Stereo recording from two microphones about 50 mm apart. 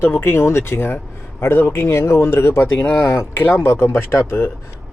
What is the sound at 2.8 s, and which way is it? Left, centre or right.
Speech, left.